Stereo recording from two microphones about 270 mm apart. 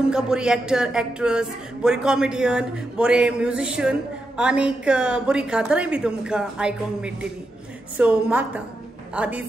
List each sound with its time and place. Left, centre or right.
0.1 s speech: centre